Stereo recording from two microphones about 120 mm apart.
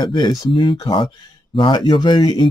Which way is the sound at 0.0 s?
35° left (ahead or behind).